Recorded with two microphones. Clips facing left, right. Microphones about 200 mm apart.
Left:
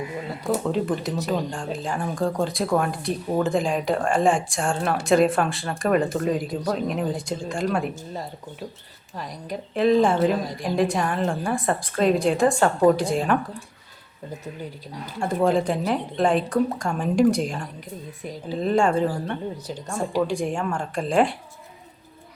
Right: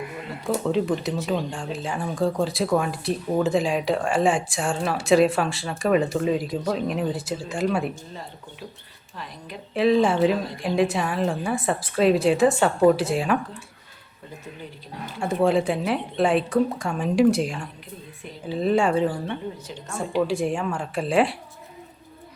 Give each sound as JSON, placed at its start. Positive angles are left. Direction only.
{"t": 0.5, "sound": "speech", "side_deg": 0}
{"t": 9.1, "sound": "a woman's voice", "side_deg": 40}
{"t": 9.7, "sound": "speech", "side_deg": 0}
{"t": 15.2, "sound": "speech", "side_deg": 0}
{"t": 18.6, "sound": "speech", "side_deg": -5}
{"t": 20.2, "sound": "speech", "side_deg": 0}